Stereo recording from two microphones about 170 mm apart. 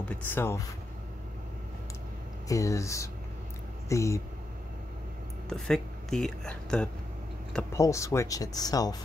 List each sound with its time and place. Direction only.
0.1 s speech: 10° left (ahead or behind)
2.4 s speech: 20° left (ahead or behind)
5.5 s speech: 5° left (ahead or behind)
7.7 s speech: 15° left (ahead or behind)